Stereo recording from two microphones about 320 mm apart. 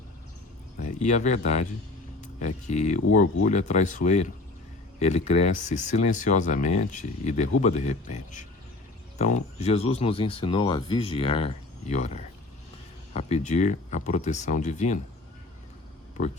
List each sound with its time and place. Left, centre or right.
0.9 s speech: left
2.6 s speech: left